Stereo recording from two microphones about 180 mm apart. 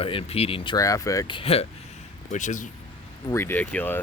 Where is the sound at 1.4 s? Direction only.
35° left (ahead or behind).